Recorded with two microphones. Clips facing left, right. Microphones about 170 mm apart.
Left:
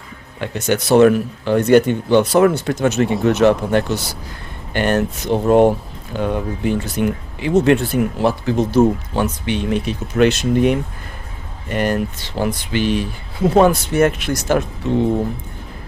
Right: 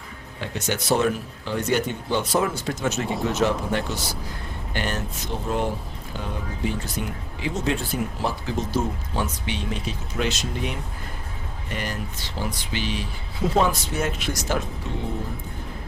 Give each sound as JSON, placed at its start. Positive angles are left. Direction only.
{"t": 0.5, "sound": "speech", "side_deg": 65}